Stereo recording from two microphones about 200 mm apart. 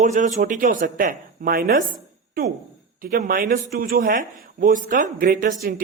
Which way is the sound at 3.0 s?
40° right (ahead or behind).